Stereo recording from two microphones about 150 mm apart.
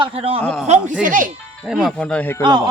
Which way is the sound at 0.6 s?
50° right (ahead or behind).